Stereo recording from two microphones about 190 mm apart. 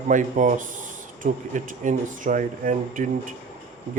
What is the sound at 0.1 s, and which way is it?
Speech, 40° right (ahead or behind).